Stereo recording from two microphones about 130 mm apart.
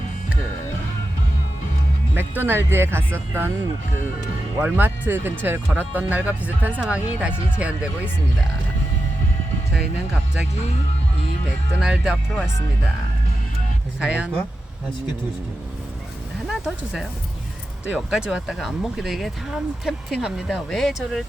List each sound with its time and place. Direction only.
2.1 s speech: 15° right (ahead or behind)
3.9 s speech: 90° left
4.6 s speech: 15° right (ahead or behind)
11.8 s speech: 5° right (ahead or behind)
14.0 s speech: 5° right (ahead or behind)
16.5 s speech: 5° right (ahead or behind)